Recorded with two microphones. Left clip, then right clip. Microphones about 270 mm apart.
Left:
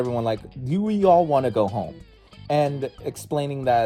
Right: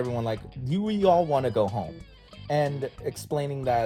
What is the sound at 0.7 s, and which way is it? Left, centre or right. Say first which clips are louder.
Speech: left 4 dB; centre.